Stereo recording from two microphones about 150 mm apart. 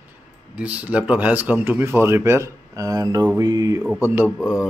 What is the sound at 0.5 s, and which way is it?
Speech, 10° right (ahead or behind).